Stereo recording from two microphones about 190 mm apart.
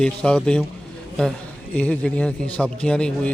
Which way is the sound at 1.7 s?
5° left (ahead or behind).